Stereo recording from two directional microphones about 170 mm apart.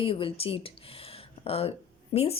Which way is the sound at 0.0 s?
30° left (ahead or behind).